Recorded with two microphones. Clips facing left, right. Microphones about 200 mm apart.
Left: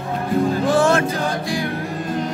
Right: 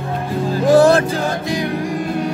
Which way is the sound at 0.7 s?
35° right (ahead or behind).